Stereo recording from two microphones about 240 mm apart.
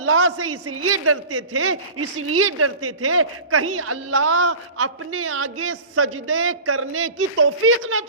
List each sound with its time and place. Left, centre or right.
0.0 s a man's voice: right